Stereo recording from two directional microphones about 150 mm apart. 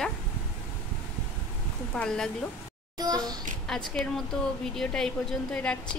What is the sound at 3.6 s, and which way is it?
A woman's voice, 5° left (ahead or behind).